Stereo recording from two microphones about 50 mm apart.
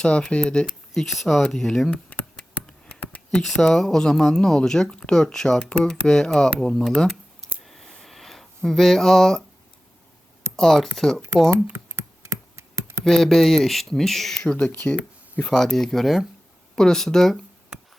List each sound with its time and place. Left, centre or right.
0.0 s speech: left
0.9 s speech: centre
1.9 s a sound: left
3.4 s speech: centre
7.6 s a sound: centre
10.6 s speech: centre
11.5 s computer keyboard: right
13.1 s speech: centre
14.4 s speech: left
14.8 s a sound: left
15.4 s speech: centre
17.7 s music: centre